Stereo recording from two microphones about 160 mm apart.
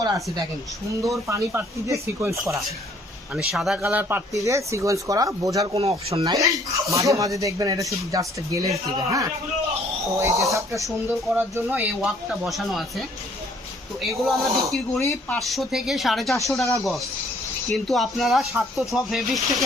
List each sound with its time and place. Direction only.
0.0 s speech: 25° right (ahead or behind)
3.3 s speech: centre (ahead or behind); by 5.6 s 20° right (ahead or behind)
5.7 s speech: 35° right (ahead or behind)
6.2 s speech: 20° right (ahead or behind)
10.8 s speech: 5° right (ahead or behind)
17.7 s speech: centre (ahead or behind)